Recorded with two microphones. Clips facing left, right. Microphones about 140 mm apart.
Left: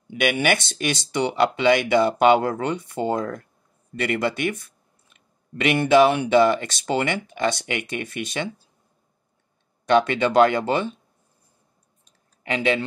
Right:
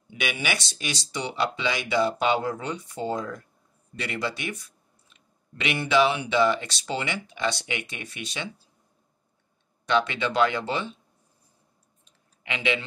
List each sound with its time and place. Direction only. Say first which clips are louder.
0.1 s speech: left 8 dB; 55° left (ahead or behind)
9.8 s speech: left 6 dB; 50° left (ahead or behind)
12.0 s a sound: left 7 dB; 40° left (ahead or behind)